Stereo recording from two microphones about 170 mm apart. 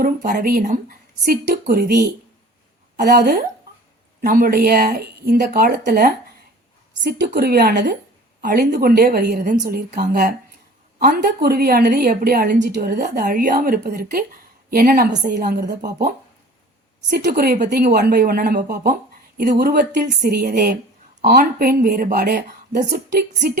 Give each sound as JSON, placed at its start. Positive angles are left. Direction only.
{"t": 0.0, "sound": "speech", "side_deg": -55}
{"t": 7.3, "sound": "speech", "side_deg": -65}
{"t": 13.0, "sound": "speech", "side_deg": -55}
{"t": 15.4, "sound": "speech", "side_deg": -75}
{"t": 20.2, "sound": "speech", "side_deg": -65}